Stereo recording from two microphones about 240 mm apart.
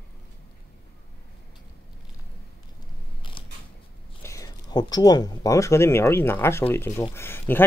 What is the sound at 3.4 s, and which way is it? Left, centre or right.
Creak, left.